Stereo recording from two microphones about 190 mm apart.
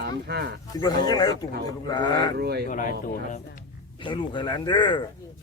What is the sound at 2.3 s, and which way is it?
Speech, 60° right (ahead or behind).